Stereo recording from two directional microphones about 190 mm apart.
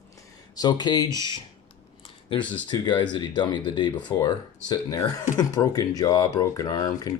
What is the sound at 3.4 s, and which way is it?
Speech, 25° left (ahead or behind).